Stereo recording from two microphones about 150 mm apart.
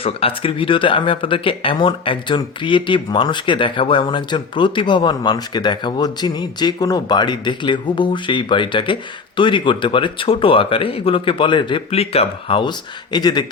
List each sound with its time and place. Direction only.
0.0 s speech: 40° left (ahead or behind)